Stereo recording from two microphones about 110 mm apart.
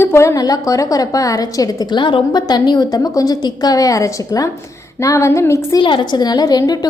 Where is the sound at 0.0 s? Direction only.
25° left (ahead or behind).